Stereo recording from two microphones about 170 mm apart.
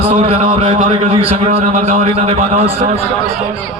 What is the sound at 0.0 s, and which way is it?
A man's voice, 35° right (ahead or behind).